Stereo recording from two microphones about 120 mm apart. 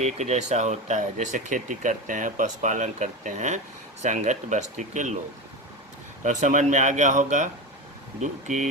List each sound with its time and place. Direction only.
0.0 s speech: 75° right (ahead or behind); by 5.1 s 90° right
6.2 s speech: 90° right